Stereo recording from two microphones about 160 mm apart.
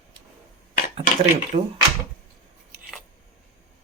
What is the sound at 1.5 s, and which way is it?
Speech, 50° right (ahead or behind).